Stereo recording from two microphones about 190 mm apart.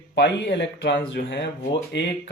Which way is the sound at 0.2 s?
65° left (ahead or behind).